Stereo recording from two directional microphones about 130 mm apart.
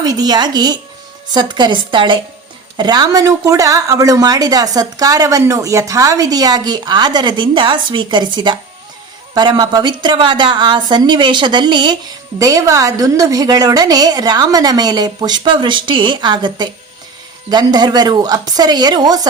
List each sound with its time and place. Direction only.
0.0 s a woman's voice: 30° right (ahead or behind)